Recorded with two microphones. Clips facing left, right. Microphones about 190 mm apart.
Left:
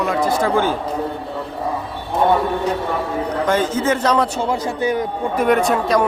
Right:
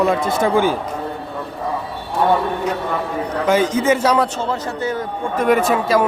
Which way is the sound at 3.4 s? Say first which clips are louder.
Right 3 dB; 10° right (ahead or behind).